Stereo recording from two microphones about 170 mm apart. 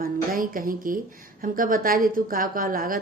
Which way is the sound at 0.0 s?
55° right (ahead or behind).